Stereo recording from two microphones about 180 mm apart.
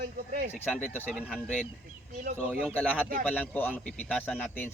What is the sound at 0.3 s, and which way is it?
Speech, 55° right (ahead or behind).